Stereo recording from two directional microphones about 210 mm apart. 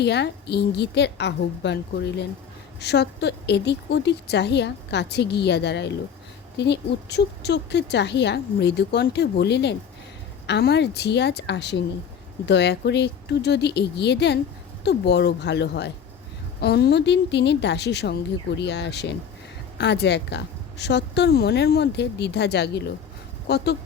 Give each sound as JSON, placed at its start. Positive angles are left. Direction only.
{"t": 0.0, "sound": "a woman's voice", "side_deg": 55}